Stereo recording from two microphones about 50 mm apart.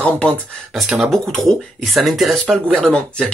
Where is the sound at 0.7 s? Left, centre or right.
Centre.